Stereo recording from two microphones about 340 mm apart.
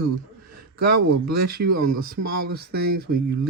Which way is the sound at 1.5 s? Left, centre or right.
Right.